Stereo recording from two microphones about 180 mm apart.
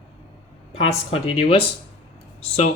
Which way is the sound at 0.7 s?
35° left (ahead or behind).